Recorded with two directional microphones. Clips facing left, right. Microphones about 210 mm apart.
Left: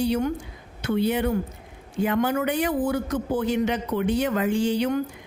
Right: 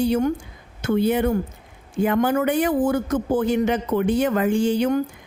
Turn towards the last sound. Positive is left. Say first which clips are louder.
# right 3 dB
turn(degrees=-45)  # may be behind; listen again after turning